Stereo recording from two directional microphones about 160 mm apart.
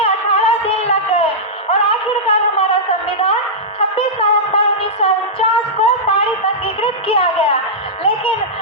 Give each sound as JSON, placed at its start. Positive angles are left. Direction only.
{"t": 0.0, "sound": "music", "side_deg": 40}
{"t": 1.7, "sound": "a sound", "side_deg": 35}
{"t": 3.8, "sound": "music", "side_deg": 35}